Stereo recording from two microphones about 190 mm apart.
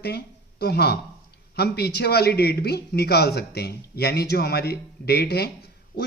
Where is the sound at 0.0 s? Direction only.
55° left (ahead or behind).